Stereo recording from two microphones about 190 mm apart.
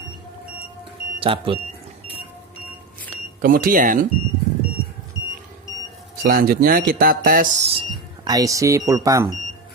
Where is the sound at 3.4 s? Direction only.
45° right (ahead or behind).